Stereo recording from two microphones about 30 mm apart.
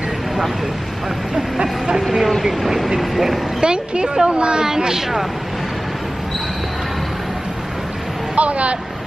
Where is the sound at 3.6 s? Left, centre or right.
Right.